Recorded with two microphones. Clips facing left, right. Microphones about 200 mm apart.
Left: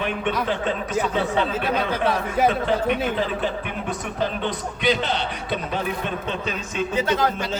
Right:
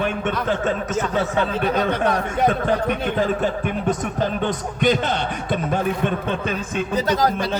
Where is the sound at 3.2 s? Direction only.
45° right (ahead or behind).